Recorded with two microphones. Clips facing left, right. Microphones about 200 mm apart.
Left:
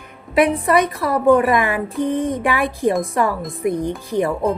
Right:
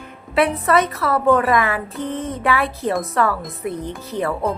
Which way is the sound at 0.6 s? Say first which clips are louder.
Left 1 dB; 15° left (ahead or behind).